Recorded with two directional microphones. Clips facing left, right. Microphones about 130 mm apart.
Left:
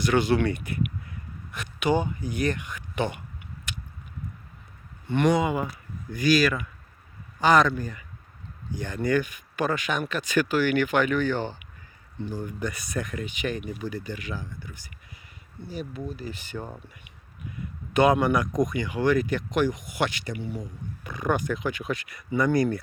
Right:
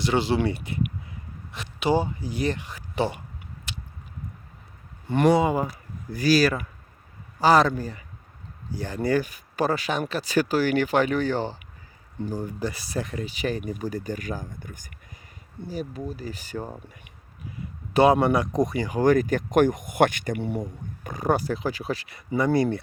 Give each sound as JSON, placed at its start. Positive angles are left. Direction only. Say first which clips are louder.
{"t": 0.0, "sound": "speech", "louder": "left 1 dB", "side_deg": -25}
{"t": 3.7, "sound": "biting", "louder": "even", "side_deg": -30}
{"t": 5.0, "sound": "speech", "louder": "right 3 dB", "side_deg": -35}
{"t": 21.0, "sound": "speech", "louder": "right 2 dB", "side_deg": -40}